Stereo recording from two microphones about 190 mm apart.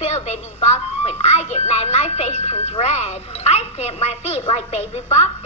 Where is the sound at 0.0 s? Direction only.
35° left (ahead or behind).